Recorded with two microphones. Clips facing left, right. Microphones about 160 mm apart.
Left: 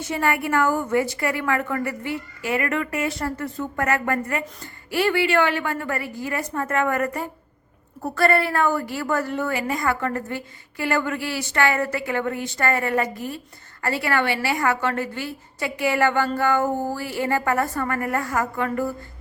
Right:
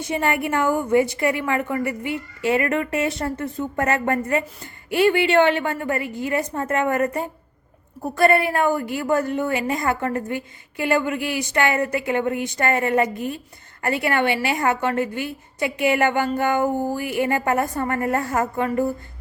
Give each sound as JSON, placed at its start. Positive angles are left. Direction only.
{"t": 0.0, "sound": "a woman's voice", "side_deg": -20}